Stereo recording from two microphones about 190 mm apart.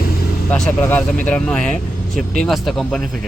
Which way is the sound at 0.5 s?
5° left (ahead or behind).